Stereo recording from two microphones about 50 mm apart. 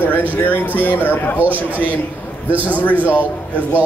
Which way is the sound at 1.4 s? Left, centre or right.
Right.